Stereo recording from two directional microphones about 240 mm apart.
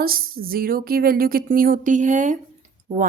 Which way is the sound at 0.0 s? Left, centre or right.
Right.